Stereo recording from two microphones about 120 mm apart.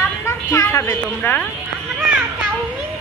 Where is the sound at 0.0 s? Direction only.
25° left (ahead or behind).